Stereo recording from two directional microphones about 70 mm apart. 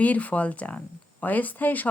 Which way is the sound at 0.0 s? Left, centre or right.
Left.